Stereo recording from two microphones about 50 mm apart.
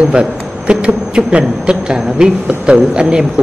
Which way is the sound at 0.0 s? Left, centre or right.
Right.